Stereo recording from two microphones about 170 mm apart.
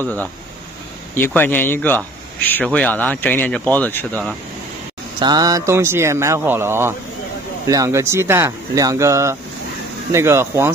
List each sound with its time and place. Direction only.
1.1 s a man's voice: 10° left (ahead or behind)
5.2 s speech: 20° right (ahead or behind)